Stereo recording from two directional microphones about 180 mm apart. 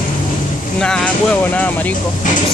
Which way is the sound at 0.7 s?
5° left (ahead or behind).